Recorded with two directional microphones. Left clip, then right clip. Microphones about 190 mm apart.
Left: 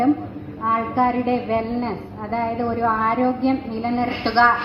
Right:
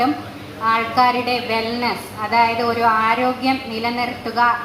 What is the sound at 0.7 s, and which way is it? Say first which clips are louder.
A woman's voice: right 4 dB; 40° left (ahead or behind).